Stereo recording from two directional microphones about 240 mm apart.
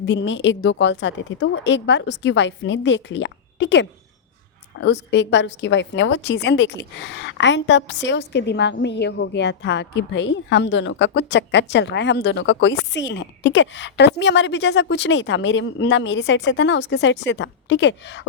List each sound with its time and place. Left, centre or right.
0.0 s a woman's voice: left